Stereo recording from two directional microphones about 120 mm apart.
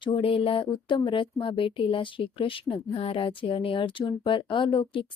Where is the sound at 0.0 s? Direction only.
45° left (ahead or behind).